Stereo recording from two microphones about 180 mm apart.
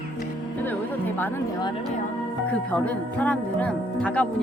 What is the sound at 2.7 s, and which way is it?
Speech, 5° left (ahead or behind).